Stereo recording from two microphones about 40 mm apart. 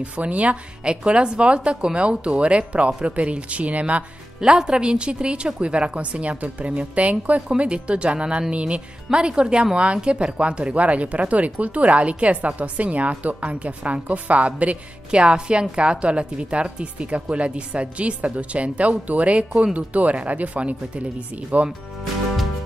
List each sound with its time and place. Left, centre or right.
0.0 s a woman's voice: right
4.4 s a woman's voice: centre; by 21.0 s right